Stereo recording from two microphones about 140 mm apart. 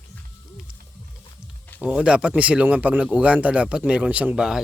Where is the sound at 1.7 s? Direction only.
10° right (ahead or behind).